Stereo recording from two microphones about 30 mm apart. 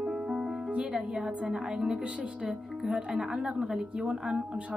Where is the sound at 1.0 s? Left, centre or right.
Right.